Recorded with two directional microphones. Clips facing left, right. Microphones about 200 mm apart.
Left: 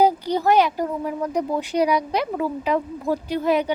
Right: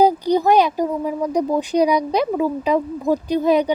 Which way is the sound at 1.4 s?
15° right (ahead or behind).